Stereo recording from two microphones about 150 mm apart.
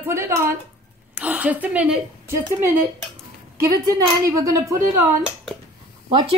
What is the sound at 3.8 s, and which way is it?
A woman's voice, 20° right (ahead or behind).